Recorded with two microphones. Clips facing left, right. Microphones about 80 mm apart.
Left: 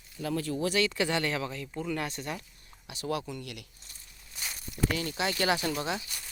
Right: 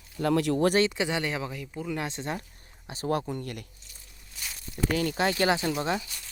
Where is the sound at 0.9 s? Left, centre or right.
Centre.